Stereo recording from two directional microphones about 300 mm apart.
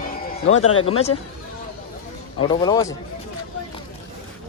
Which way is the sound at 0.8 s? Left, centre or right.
Centre.